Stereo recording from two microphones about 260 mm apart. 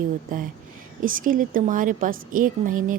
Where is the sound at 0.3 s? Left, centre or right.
Right.